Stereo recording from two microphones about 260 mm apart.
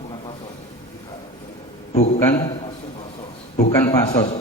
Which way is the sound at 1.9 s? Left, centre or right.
Left.